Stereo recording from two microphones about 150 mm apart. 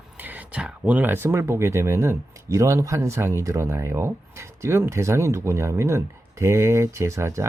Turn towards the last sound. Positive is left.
turn(degrees=-20)  # may be behind; listen again after turning